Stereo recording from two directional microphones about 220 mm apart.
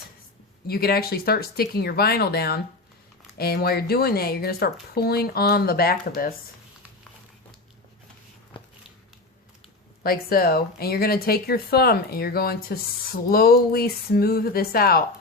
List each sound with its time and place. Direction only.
0.7 s speech: 45° left (ahead or behind)
10.0 s speech: 40° left (ahead or behind)